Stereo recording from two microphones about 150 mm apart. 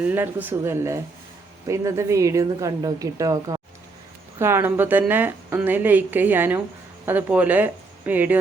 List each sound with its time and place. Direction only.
0.0 s a woman's voice: 10° right (ahead or behind)